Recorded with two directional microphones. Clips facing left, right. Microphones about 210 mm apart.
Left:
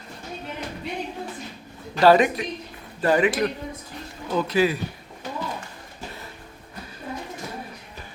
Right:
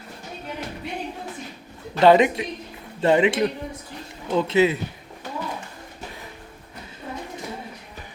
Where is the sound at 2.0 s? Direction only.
20° right (ahead or behind).